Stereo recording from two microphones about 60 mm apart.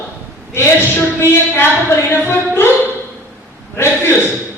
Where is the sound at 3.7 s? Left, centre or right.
Left.